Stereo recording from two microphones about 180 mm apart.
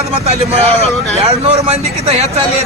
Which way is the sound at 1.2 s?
35° right (ahead or behind).